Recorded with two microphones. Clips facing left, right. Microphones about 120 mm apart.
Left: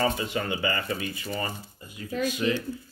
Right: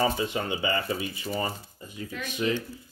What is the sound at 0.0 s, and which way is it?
Speech, 20° right (ahead or behind).